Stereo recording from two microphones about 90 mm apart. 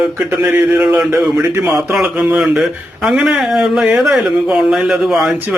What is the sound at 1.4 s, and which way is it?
Speech, 25° right (ahead or behind).